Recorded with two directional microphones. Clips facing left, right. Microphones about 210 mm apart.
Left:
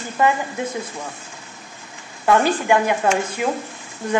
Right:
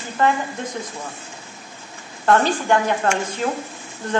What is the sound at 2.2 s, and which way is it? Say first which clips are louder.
Speech: left 1 dB; 10° left (ahead or behind).